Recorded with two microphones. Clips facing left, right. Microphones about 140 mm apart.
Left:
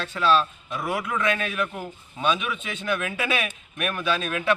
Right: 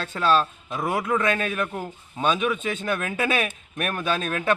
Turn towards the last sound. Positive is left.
turn(degrees=-40)  # may be behind; listen again after turning